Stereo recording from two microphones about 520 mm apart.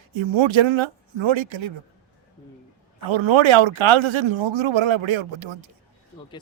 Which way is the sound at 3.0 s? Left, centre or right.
Right.